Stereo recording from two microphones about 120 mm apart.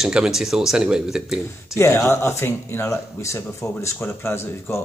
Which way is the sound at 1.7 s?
25° left (ahead or behind).